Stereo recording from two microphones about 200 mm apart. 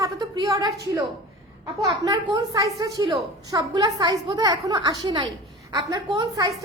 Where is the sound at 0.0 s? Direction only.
15° right (ahead or behind).